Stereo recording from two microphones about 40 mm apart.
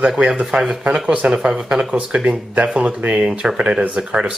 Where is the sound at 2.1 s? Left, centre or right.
Right.